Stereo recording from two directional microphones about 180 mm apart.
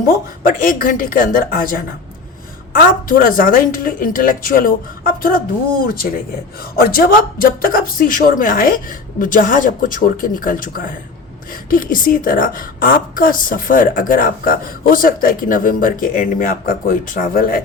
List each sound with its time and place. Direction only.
0.1 s a woman's voice: 50° left (ahead or behind)
3.1 s a woman's voice: 50° left (ahead or behind)